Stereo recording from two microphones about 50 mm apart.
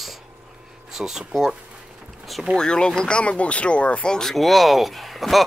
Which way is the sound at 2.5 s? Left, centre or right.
Centre.